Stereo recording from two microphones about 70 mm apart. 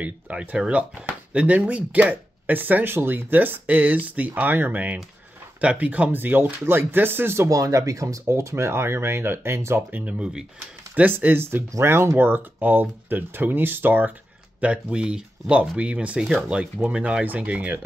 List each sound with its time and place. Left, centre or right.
0.0 s speech: centre
7.4 s speech: right; by 10.4 s centre
11.0 s speech: right
14.6 s speech: centre